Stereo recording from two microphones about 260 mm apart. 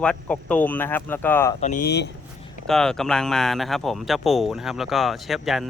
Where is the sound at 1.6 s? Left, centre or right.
Left.